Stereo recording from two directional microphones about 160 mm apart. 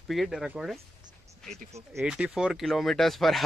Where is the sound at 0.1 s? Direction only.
Centre (ahead or behind).